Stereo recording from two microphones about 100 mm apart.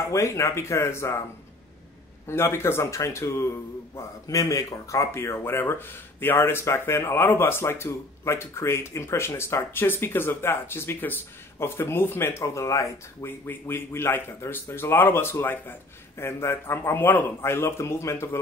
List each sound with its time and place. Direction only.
0.1 s speech: 30° left (ahead or behind)
2.2 s speech: 25° left (ahead or behind)